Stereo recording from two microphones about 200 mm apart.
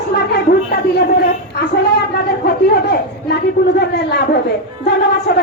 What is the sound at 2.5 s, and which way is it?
A man's voice, 55° left (ahead or behind).